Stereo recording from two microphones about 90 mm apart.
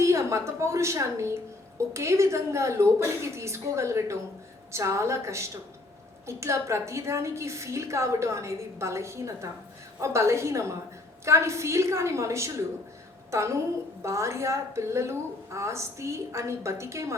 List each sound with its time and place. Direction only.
0.0 s a woman's voice: 35° right (ahead or behind)